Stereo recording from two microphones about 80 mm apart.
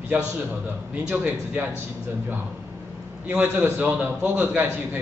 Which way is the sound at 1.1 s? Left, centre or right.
Centre.